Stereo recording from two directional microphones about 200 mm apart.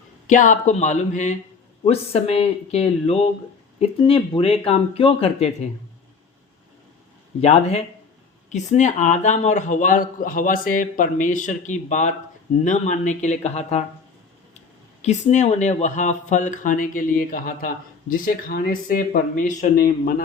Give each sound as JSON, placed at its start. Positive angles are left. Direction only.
{"t": 0.3, "sound": "speech", "side_deg": 40}
{"t": 7.4, "sound": "speech", "side_deg": 35}
{"t": 15.0, "sound": "speech", "side_deg": 35}